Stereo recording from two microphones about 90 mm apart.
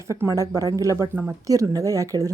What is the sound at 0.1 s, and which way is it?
Speech, 35° right (ahead or behind).